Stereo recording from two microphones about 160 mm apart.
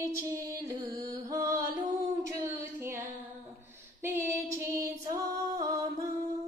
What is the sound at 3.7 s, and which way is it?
Female singing, 15° right (ahead or behind).